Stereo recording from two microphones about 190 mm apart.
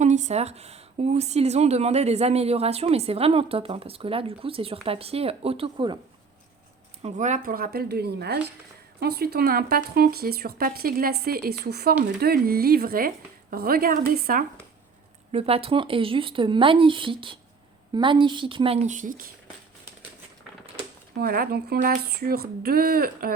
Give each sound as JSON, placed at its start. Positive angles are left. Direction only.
{"t": 0.0, "sound": "a woman's voice", "side_deg": -40}
{"t": 7.0, "sound": "speech", "side_deg": -40}
{"t": 15.3, "sound": "speech", "side_deg": -30}
{"t": 21.2, "sound": "speech", "side_deg": -50}